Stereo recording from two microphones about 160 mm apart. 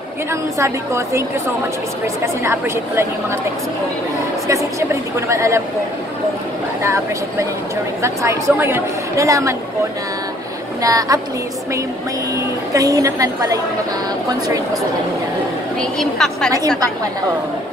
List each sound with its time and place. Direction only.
0.3 s a woman's voice: 15° right (ahead or behind)
2.4 s a woman's voice: 15° right (ahead or behind)
4.5 s a woman's voice: 20° right (ahead or behind)
6.8 s a woman's voice: 20° right (ahead or behind)
10.8 s a woman's voice: 20° right (ahead or behind)
12.7 s a woman's voice: 20° right (ahead or behind)
15.8 s a woman's voice: 5° left (ahead or behind)